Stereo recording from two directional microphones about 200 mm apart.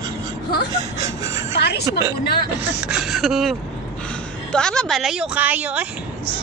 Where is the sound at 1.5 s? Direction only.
55° left (ahead or behind).